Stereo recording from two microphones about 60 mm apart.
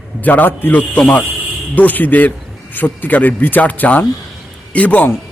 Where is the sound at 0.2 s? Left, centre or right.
Left.